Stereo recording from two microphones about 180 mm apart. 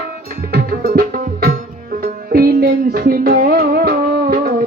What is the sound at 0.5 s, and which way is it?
Music, 60° right (ahead or behind).